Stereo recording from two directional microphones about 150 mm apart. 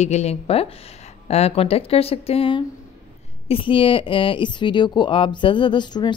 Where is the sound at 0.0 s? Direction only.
45° left (ahead or behind).